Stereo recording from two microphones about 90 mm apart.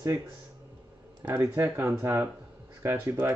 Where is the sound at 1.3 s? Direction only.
30° right (ahead or behind).